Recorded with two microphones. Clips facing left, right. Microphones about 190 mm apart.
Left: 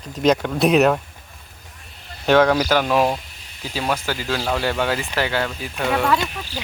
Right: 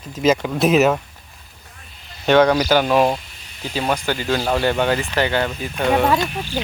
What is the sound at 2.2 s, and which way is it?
Speech, centre (ahead or behind).